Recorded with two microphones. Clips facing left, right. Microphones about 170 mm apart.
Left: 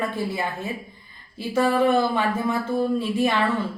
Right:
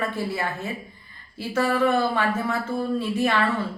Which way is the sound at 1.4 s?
15° left (ahead or behind).